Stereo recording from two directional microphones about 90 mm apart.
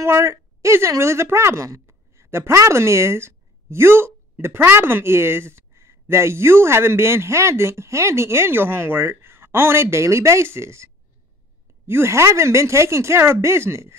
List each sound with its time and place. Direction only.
0.0 s speech: 30° right (ahead or behind)